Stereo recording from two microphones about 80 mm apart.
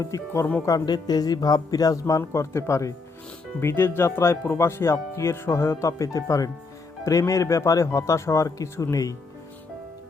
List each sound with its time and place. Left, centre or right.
0.0 s speech: left
0.9 s speech: left